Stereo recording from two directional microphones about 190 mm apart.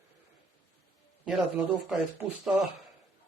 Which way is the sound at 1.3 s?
5° right (ahead or behind).